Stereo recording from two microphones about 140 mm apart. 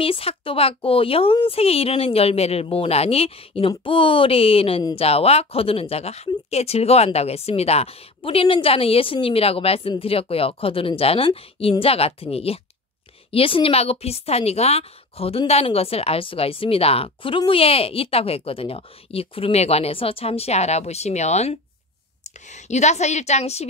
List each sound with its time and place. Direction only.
0.0 s a woman's voice: 40° left (ahead or behind)